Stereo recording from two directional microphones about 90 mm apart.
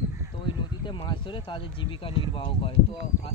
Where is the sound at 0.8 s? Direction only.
65° left (ahead or behind).